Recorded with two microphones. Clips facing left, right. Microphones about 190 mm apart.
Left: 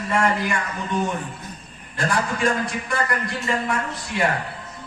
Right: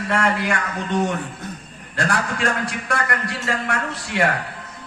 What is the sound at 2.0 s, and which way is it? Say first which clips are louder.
A man's voice: even; 75° right (ahead or behind).